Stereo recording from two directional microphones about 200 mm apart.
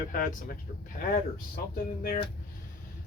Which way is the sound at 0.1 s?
45° left (ahead or behind).